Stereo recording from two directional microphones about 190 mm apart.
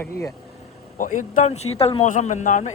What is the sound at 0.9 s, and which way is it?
Speech, 45° left (ahead or behind).